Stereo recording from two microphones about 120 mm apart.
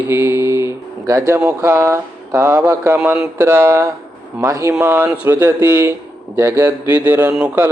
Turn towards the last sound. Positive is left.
turn(degrees=-10)  # may be behind; listen again after turning